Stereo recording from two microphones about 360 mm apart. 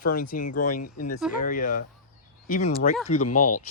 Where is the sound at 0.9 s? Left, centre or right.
Left.